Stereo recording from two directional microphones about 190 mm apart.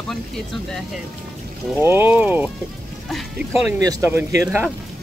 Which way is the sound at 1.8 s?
10° right (ahead or behind).